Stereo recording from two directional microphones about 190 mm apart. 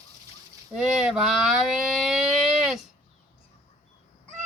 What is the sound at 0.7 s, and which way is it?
Speech, centre (ahead or behind).